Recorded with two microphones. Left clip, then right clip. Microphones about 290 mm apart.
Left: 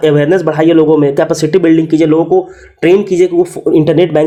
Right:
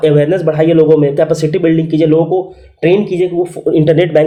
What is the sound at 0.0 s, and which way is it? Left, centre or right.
Speech, left.